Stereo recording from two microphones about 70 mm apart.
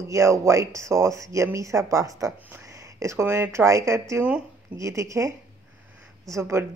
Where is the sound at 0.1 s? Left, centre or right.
Right.